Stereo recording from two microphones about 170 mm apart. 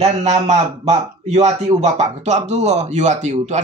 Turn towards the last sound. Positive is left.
turn(degrees=-45)  # may be behind; listen again after turning